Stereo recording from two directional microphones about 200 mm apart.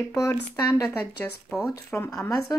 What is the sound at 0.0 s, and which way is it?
Speech, 15° left (ahead or behind).